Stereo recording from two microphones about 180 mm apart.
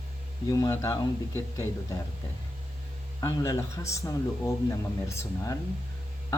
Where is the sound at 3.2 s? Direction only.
20° left (ahead or behind).